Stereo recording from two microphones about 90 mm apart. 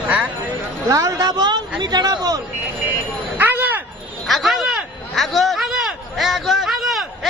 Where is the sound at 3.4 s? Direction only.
20° right (ahead or behind).